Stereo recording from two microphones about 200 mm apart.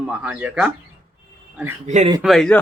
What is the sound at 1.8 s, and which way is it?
Speech, 35° right (ahead or behind).